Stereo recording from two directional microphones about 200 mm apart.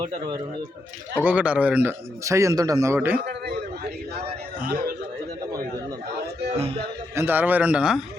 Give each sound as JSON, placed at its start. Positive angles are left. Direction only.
{"t": 1.1, "sound": "a man's voice", "side_deg": -10}
{"t": 4.6, "sound": "a man's voice", "side_deg": -50}
{"t": 7.2, "sound": "a man's voice", "side_deg": -10}